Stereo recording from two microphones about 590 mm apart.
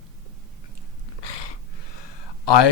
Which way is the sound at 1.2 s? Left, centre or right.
Left.